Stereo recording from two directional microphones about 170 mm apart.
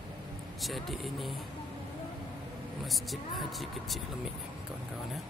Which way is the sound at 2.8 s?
Centre (ahead or behind).